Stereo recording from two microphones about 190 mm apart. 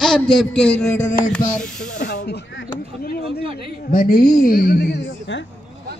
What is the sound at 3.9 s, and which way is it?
A woman's voice, 45° left (ahead or behind).